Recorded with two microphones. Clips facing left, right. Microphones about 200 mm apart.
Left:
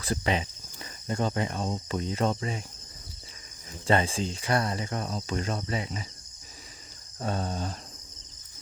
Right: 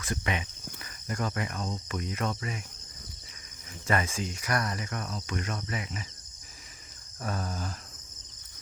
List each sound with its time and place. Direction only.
0.0 s speech: 30° left (ahead or behind)
3.8 s speech: 30° left (ahead or behind)
7.2 s speech: 25° left (ahead or behind)